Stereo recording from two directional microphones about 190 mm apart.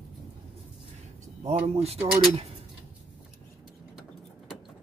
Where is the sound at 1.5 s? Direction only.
35° right (ahead or behind).